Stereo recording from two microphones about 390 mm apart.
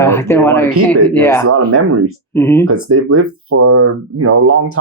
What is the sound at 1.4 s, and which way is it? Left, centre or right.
Speech, right.